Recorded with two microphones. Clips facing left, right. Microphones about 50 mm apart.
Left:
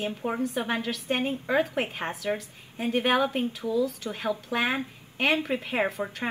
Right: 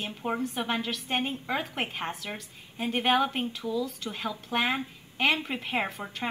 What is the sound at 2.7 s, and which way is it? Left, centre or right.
Speech, right.